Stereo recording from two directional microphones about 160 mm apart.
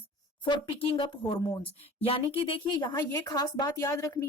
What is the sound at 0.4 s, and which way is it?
A woman's voice, 30° left (ahead or behind).